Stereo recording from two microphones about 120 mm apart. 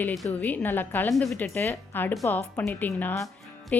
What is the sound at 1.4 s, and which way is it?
A woman's voice, 15° left (ahead or behind).